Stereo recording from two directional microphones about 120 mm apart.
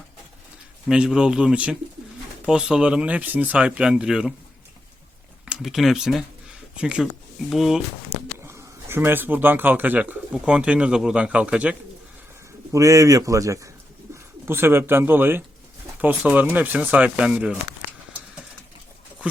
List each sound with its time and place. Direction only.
0.9 s speech: 5° right (ahead or behind)
5.5 s speech: 5° right (ahead or behind)
8.4 s speech: 20° right (ahead or behind)
12.7 s speech: 25° right (ahead or behind); by 17.6 s 10° right (ahead or behind)